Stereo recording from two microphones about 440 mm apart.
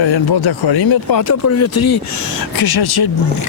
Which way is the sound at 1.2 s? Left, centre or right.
Left.